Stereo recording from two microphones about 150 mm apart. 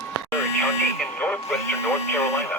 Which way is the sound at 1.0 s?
10° left (ahead or behind).